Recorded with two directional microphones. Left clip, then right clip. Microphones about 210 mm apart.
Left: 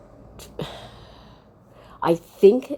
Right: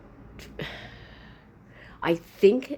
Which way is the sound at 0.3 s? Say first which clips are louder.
Left 3 dB; 20° left (ahead or behind).